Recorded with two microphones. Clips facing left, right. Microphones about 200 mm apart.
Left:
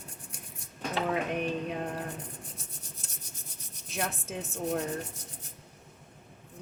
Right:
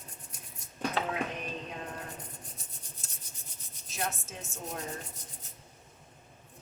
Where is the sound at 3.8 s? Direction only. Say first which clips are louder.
Left 2 dB; 60° left (ahead or behind).